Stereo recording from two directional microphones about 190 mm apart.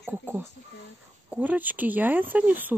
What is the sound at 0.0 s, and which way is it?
Speech, 10° right (ahead or behind).